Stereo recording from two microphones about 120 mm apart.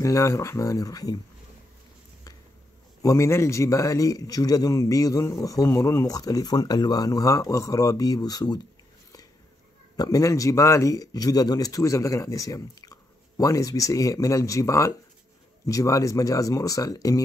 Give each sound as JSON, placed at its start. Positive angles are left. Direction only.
{"t": 0.0, "sound": "a man's voice", "side_deg": 25}
{"t": 3.0, "sound": "a man's voice", "side_deg": 25}
{"t": 9.9, "sound": "a man's voice", "side_deg": 30}